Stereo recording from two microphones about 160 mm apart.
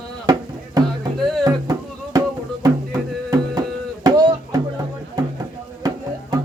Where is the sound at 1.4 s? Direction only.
20° right (ahead or behind).